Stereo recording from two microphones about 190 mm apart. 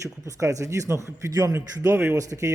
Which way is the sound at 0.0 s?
15° right (ahead or behind).